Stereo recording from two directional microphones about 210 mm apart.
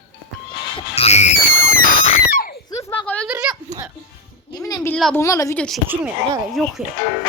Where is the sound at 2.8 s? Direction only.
10° left (ahead or behind).